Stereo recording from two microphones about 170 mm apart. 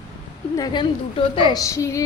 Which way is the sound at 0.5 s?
25° left (ahead or behind).